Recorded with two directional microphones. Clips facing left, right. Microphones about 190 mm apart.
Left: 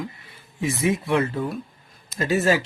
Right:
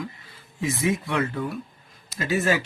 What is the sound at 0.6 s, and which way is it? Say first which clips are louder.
Speech: left 2 dB; 25° left (ahead or behind).